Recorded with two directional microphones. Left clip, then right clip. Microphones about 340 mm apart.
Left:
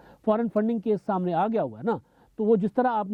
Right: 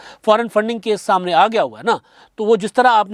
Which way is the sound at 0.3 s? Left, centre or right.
Centre.